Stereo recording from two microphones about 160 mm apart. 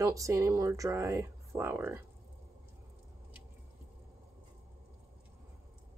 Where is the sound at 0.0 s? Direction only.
20° right (ahead or behind).